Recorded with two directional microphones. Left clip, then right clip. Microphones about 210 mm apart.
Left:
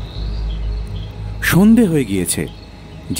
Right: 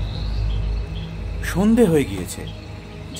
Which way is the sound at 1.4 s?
45° left (ahead or behind).